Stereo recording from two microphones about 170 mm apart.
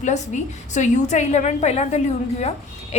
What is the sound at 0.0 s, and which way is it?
A woman's voice, 45° left (ahead or behind).